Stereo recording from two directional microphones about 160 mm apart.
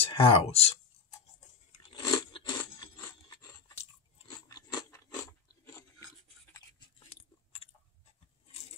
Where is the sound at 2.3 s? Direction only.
30° left (ahead or behind).